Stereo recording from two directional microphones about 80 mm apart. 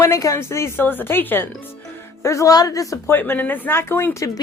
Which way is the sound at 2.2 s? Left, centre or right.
Left.